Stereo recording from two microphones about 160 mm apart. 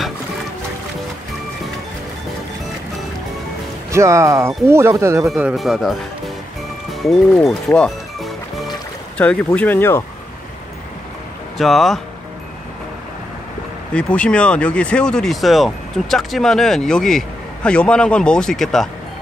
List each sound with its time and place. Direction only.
3.9 s speech: 20° right (ahead or behind)
5.2 s speech: 5° right (ahead or behind)
6.9 s music: centre (ahead or behind)
9.2 s speech: 10° left (ahead or behind)
11.5 s speech: centre (ahead or behind)
13.9 s speech: 5° left (ahead or behind)